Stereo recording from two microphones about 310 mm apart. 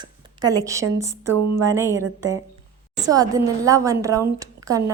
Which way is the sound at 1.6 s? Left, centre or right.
Centre.